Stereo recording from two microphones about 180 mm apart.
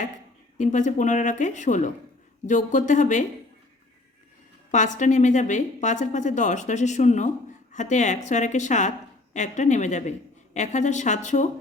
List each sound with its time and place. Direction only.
0.6 s a woman's voice: 40° left (ahead or behind)
4.7 s a woman's voice: 40° left (ahead or behind)